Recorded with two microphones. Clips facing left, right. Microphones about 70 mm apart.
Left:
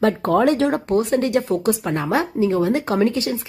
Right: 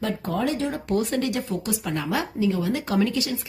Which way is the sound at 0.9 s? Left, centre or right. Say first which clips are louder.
Left 3 dB; left.